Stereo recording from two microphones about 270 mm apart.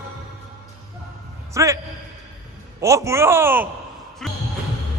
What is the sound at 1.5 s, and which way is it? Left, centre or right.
Speech, centre.